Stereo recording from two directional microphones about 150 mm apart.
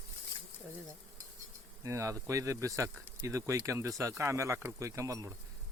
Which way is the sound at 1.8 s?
20° right (ahead or behind).